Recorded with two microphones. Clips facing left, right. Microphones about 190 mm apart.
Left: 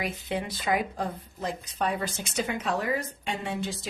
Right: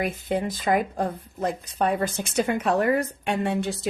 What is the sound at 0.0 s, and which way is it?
Speech, 50° right (ahead or behind).